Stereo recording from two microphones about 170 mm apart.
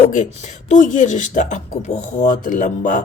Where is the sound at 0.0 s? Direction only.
40° left (ahead or behind).